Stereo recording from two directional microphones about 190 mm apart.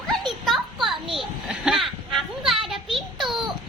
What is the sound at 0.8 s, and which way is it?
Children playing, centre (ahead or behind).